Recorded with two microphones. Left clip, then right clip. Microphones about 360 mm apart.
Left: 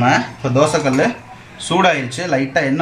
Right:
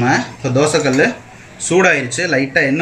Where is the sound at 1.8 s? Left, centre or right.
Left.